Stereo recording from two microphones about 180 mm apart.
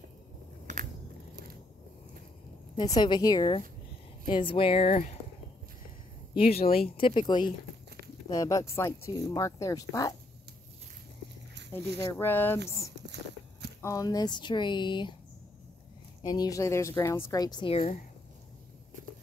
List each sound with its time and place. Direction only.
0.7 s biting: 40° right (ahead or behind)
2.7 s a woman's voice: 25° left (ahead or behind)
6.7 s a woman's voice: 30° left (ahead or behind)
12.0 s speech: 15° left (ahead or behind)
12.9 s a sound: 70° right (ahead or behind)
13.7 s a woman's voice: 20° left (ahead or behind)
16.2 s a woman's voice: 20° left (ahead or behind)